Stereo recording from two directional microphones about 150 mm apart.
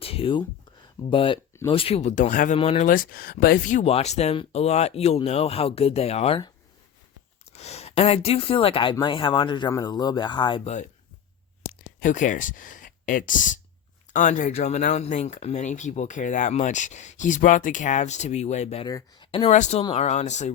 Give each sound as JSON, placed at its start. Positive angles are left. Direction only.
{"t": 0.0, "sound": "a sound", "side_deg": 40}
{"t": 1.1, "sound": "speech", "side_deg": 35}
{"t": 2.6, "sound": "speech", "side_deg": 45}
{"t": 2.9, "sound": "speech", "side_deg": 70}
{"t": 3.8, "sound": "speech", "side_deg": 45}
{"t": 7.5, "sound": "speech", "side_deg": 45}
{"t": 10.6, "sound": "speech", "side_deg": 45}
{"t": 11.9, "sound": "speech", "side_deg": 60}
{"t": 18.9, "sound": "speech", "side_deg": 25}
{"t": 19.3, "sound": "speech", "side_deg": 45}